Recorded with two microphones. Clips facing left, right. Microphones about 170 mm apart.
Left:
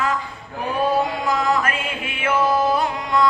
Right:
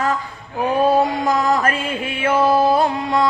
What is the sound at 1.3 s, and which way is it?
Mantra, 40° right (ahead or behind).